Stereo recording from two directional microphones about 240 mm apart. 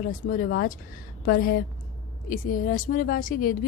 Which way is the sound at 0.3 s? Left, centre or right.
Left.